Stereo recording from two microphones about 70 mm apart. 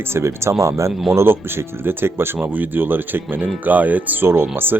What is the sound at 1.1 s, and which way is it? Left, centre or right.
Speech, right.